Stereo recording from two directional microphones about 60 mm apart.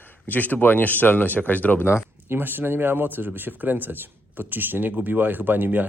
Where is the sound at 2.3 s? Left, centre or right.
Right.